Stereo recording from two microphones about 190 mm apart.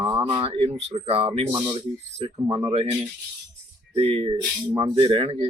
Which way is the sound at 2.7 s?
30° right (ahead or behind).